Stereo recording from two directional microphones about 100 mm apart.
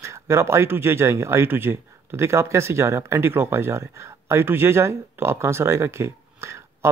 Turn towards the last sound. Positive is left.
turn(degrees=-25)  # may be behind; listen again after turning